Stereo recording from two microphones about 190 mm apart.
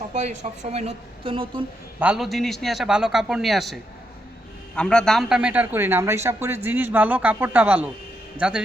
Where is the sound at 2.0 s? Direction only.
5° right (ahead or behind).